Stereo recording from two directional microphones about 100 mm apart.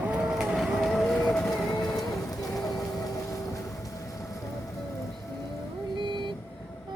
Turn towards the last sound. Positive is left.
turn(degrees=-55)  # may be behind; listen again after turning